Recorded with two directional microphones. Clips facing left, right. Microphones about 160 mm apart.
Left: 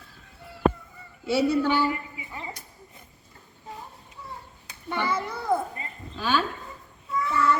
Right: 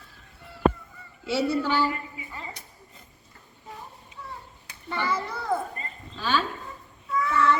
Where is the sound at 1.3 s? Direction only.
15° left (ahead or behind).